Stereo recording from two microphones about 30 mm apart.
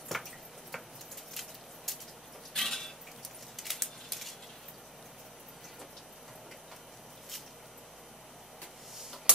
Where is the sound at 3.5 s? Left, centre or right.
Centre.